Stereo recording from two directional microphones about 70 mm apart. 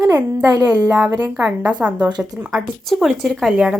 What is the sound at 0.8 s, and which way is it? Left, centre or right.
Speech, centre.